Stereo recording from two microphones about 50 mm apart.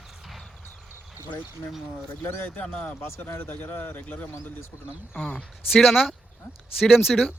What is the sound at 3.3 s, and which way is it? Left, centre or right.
A man's voice, left.